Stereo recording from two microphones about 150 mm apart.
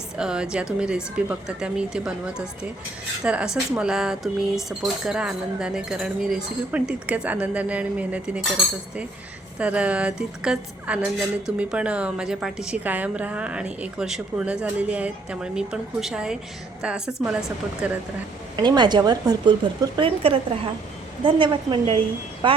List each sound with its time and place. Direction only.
0.2 s speech: 5° right (ahead or behind)
9.6 s a woman's voice: 10° right (ahead or behind)
18.5 s a woman's voice: 30° right (ahead or behind)